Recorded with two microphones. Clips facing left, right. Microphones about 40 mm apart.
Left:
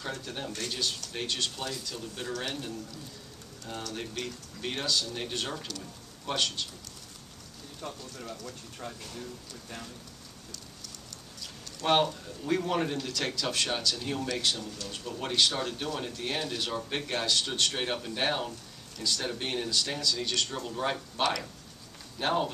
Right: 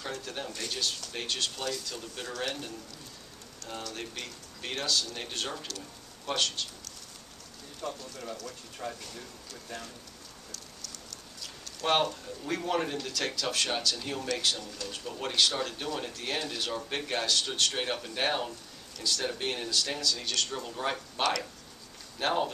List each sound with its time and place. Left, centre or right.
0.0 s speech: centre
3.6 s speech: centre
7.8 s speech: centre
8.7 s speech: centre
11.8 s speech: centre
14.9 s speech: centre
22.2 s speech: centre